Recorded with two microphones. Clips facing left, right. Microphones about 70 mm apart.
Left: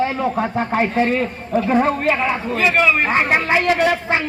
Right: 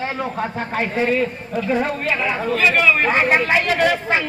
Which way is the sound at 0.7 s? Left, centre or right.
Left.